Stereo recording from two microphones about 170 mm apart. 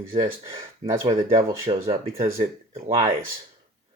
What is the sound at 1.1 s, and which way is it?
Speech, 35° right (ahead or behind).